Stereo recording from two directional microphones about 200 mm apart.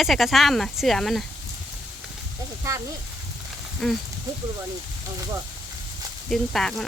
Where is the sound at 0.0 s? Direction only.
Centre (ahead or behind).